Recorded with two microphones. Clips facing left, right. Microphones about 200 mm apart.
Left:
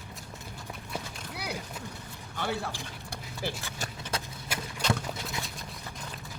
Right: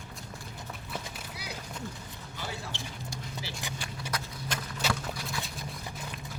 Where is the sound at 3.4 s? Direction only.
55° left (ahead or behind).